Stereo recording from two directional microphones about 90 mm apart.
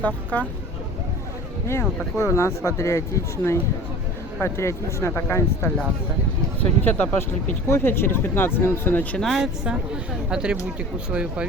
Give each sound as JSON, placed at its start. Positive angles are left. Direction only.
{"t": 0.0, "sound": "speech", "side_deg": 15}
{"t": 1.6, "sound": "speech", "side_deg": 30}
{"t": 4.4, "sound": "speech", "side_deg": 30}
{"t": 6.8, "sound": "speech", "side_deg": 20}
{"t": 9.1, "sound": "speech", "side_deg": 0}